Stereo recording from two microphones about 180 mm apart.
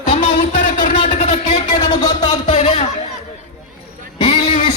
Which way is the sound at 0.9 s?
40° left (ahead or behind).